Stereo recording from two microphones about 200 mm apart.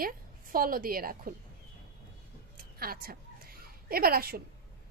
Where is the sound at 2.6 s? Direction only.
50° right (ahead or behind).